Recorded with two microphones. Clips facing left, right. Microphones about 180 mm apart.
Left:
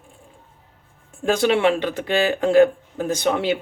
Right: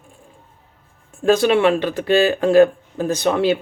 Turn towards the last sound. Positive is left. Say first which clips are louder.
# right 3 dB
turn(degrees=15)  # may be behind; listen again after turning